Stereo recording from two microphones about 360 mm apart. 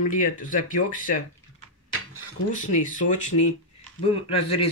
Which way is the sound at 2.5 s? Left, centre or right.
Left.